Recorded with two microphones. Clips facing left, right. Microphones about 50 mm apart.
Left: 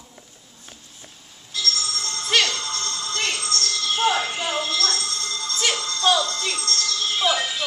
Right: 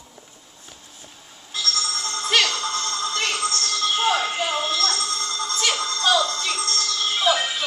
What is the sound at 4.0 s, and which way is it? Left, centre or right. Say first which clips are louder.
Music: left 1 dB; centre.